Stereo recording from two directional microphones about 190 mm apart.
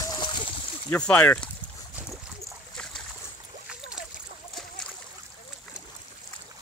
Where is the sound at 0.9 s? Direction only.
5° left (ahead or behind).